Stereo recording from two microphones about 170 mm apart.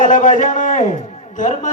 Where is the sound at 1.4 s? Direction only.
50° left (ahead or behind).